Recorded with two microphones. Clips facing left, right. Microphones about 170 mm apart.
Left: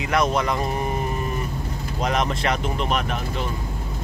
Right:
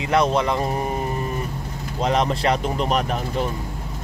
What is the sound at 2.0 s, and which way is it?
Speech, 30° right (ahead or behind).